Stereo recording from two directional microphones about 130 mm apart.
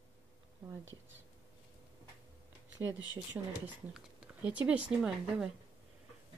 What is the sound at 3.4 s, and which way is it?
Speech, 15° right (ahead or behind).